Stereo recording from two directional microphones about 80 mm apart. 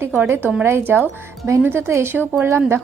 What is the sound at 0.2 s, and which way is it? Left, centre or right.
A woman's voice, right.